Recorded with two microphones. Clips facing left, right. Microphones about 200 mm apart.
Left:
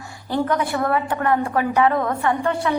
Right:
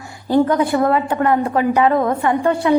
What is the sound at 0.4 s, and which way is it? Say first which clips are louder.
A woman's voice: right 6 dB; 20° right (ahead or behind).